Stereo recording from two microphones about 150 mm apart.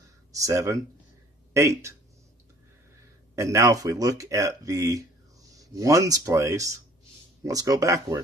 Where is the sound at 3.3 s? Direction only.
20° right (ahead or behind).